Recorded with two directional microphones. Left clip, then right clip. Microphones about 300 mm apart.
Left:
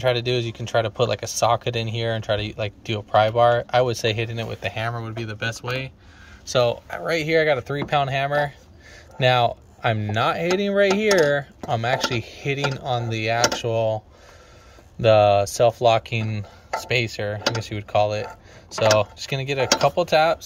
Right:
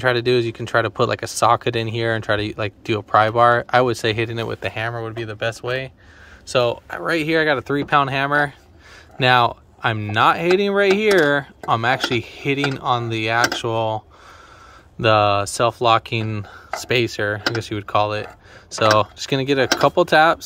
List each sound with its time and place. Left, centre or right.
0.0 s speech: centre
15.0 s speech: centre